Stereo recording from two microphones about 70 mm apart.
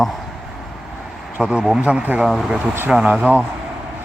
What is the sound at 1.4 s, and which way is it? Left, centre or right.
Speech, centre.